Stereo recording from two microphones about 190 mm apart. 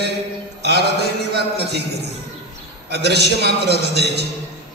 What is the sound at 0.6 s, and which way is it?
Mantra, 60° right (ahead or behind).